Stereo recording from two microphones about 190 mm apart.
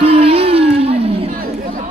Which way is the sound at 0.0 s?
30° right (ahead or behind).